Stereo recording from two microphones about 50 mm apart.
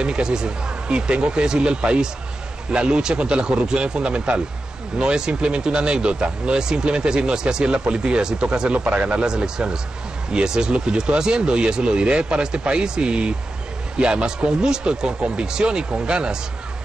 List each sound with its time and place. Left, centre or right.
0.0 s a man's voice: centre